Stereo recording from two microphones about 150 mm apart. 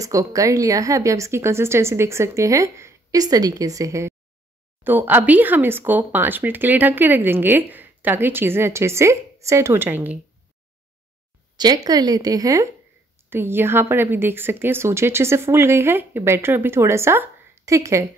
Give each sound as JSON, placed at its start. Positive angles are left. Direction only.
{"t": 0.0, "sound": "a woman's voice", "side_deg": -20}
{"t": 11.5, "sound": "a woman's voice", "side_deg": -30}